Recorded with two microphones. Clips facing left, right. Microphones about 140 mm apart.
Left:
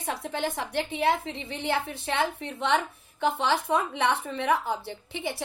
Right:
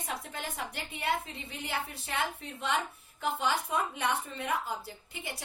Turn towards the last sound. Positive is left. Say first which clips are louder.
# left 9 dB
turn(degrees=90)